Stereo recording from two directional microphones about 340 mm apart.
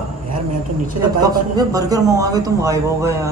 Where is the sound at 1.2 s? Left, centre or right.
Centre.